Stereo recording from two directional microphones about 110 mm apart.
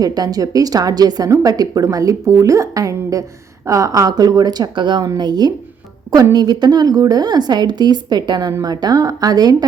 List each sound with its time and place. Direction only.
0.0 s speech: 35° right (ahead or behind)